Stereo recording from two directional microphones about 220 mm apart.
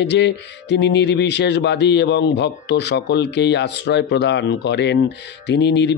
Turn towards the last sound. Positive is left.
turn(degrees=50)  # may be behind; listen again after turning